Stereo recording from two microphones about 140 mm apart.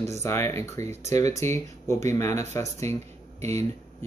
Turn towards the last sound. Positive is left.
turn(degrees=20)  # may be behind; listen again after turning